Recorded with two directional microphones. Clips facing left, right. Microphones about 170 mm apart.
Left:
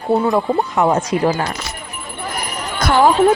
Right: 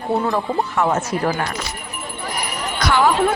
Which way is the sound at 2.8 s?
50° left (ahead or behind).